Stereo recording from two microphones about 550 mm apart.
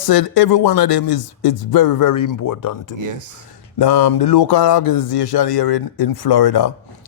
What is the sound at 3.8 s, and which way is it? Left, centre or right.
Speech, left.